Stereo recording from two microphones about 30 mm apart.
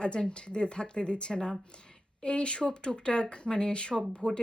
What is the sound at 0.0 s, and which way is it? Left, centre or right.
Speech, left.